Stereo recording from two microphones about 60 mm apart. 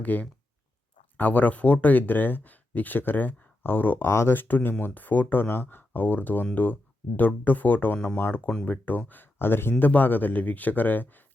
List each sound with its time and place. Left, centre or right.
0.0 s speech: left
4.1 s speech: left
4.4 s speech: left